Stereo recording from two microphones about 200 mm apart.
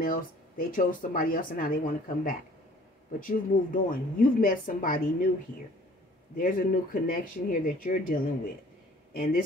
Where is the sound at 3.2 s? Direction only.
45° left (ahead or behind).